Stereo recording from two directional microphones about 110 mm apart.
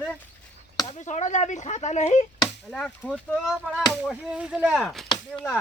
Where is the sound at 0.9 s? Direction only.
90° left.